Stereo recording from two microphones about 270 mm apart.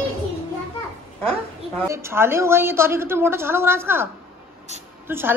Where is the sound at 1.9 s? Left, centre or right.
Centre.